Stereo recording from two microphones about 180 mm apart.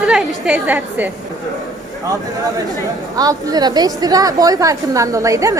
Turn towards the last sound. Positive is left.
turn(degrees=-20)  # may be behind; listen again after turning